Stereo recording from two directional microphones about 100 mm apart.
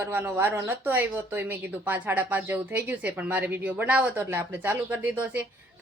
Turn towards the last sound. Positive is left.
turn(degrees=-15)  # may be behind; listen again after turning